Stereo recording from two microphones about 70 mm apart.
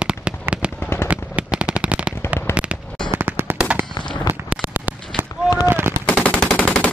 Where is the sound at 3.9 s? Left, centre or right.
Left.